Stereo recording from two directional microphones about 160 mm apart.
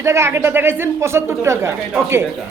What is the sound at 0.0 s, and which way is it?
Speech, 15° right (ahead or behind).